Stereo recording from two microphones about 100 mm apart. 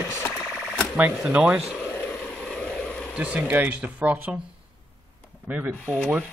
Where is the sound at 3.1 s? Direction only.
15° right (ahead or behind).